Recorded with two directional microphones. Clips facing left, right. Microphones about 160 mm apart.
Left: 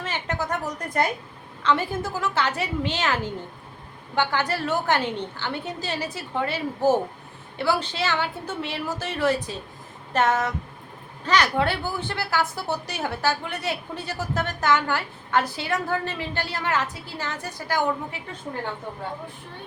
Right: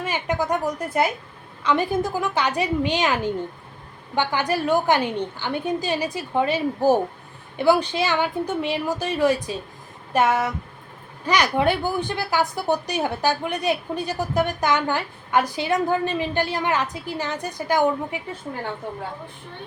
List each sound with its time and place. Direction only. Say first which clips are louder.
0.0 s a woman's voice: right 4 dB; 15° right (ahead or behind)
10.1 s a sound: right 2 dB; 10° right (ahead or behind)
11.3 s a woman's voice: right 2 dB; 15° right (ahead or behind)